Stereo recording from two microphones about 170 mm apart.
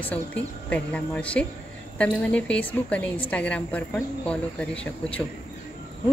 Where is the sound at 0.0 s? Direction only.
10° left (ahead or behind).